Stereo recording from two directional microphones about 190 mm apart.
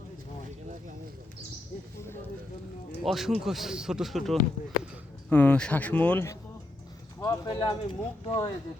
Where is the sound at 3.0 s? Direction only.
Centre (ahead or behind); by 8.5 s 25° left (ahead or behind).